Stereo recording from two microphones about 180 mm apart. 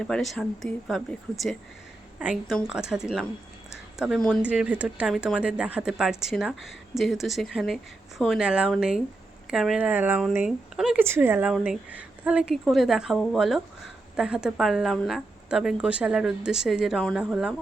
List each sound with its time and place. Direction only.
0.0 s speech: 5° left (ahead or behind)
3.7 s a sound: 5° right (ahead or behind)
4.4 s speech: 5° right (ahead or behind)